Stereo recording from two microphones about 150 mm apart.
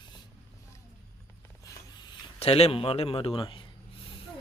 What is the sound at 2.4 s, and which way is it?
A man's voice, 40° left (ahead or behind).